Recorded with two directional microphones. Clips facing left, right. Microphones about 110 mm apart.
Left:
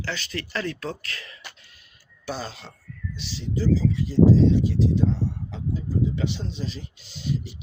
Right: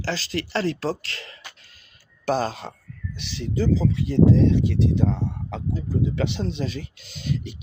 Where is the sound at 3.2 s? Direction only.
60° right (ahead or behind).